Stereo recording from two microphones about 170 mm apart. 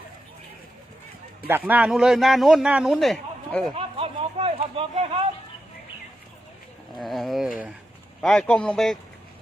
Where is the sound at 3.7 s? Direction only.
35° right (ahead or behind).